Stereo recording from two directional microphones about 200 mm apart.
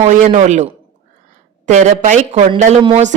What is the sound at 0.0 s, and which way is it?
Speech, 40° right (ahead or behind).